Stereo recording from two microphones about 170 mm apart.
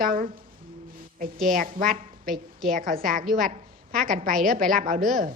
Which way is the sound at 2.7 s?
55° right (ahead or behind).